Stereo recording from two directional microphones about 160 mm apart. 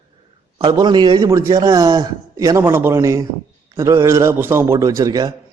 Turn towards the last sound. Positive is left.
turn(degrees=-25)  # may be behind; listen again after turning